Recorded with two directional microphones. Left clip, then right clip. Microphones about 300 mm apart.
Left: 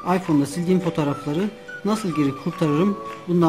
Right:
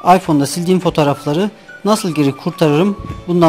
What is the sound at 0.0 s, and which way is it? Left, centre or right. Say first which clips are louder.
Speech: right 10 dB; centre.